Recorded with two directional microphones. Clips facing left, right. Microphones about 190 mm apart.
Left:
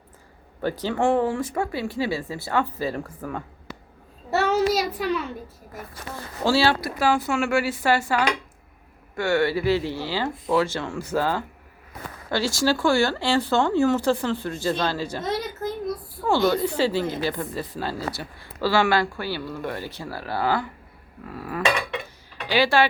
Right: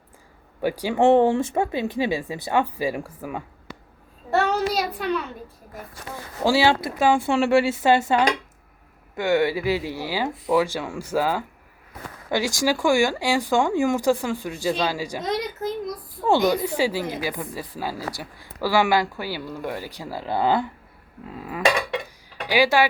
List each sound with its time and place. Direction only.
0.6 s speech: 10° right (ahead or behind)
4.3 s child singing: 5° left (ahead or behind)
4.9 s a child's voice: centre (ahead or behind)
6.4 s speech: 15° right (ahead or behind)